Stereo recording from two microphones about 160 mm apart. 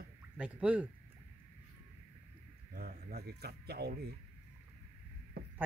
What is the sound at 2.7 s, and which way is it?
Speech, 70° right (ahead or behind).